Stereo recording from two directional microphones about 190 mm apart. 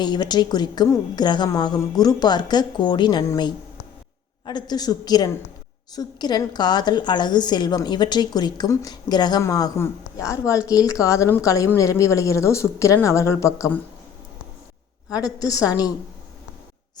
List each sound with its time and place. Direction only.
0.0 s a woman's voice: 20° left (ahead or behind)
15.1 s a woman's voice: 20° left (ahead or behind)